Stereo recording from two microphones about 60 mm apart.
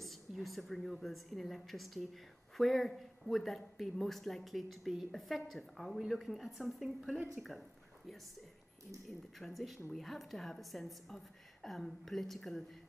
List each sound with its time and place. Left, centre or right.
0.0 s speech: centre
9.4 s speech: centre